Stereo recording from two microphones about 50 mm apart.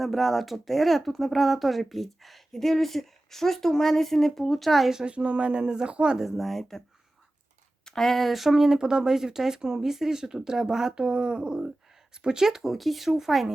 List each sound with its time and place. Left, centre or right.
0.0 s speech: centre
4.9 s speech: right
6.1 s speech: centre
7.9 s speech: centre